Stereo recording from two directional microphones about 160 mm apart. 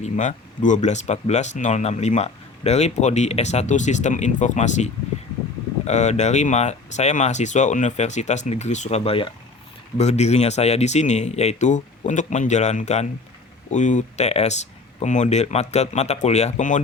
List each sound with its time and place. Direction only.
0.0 s speech: 50° left (ahead or behind)